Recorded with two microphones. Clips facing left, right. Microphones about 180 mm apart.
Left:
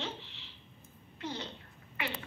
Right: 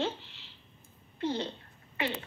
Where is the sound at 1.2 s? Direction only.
30° right (ahead or behind).